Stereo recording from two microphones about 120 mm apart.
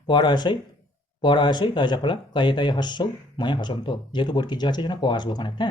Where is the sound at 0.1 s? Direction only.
40° left (ahead or behind).